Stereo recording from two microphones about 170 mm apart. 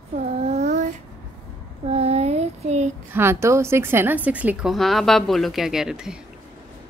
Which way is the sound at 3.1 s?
15° right (ahead or behind).